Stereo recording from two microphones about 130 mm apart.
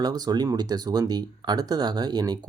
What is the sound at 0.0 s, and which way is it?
Speech, 30° right (ahead or behind).